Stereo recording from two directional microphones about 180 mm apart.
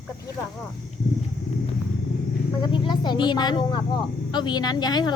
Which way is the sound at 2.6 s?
25° left (ahead or behind).